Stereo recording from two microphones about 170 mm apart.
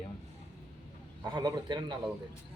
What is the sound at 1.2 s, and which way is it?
Speech, 25° right (ahead or behind).